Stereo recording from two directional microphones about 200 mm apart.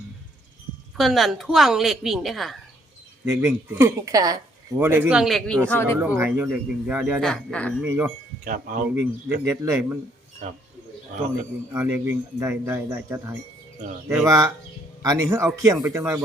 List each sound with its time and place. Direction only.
0.9 s a woman's voice: centre (ahead or behind)
3.2 s speech: 10° right (ahead or behind)
5.6 s speech: 10° left (ahead or behind)
6.0 s a woman's voice: 10° right (ahead or behind)
7.9 s speech: 10° right (ahead or behind)
8.4 s speech: 45° right (ahead or behind)
9.5 s speech: 15° right (ahead or behind)
10.4 s speech: 45° right (ahead or behind)
11.7 s speech: 10° right (ahead or behind)